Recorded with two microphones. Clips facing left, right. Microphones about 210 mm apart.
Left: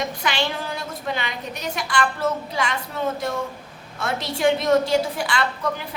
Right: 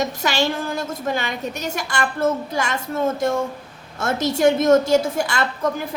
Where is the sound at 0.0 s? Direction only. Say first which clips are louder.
Right 4 dB; 45° right (ahead or behind).